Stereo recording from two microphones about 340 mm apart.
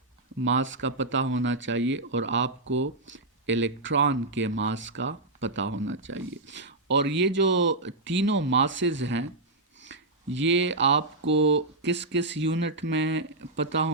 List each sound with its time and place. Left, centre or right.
0.4 s speech: right